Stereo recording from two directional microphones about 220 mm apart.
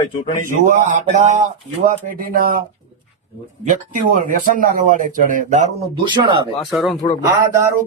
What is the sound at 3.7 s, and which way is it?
Speech, 35° right (ahead or behind).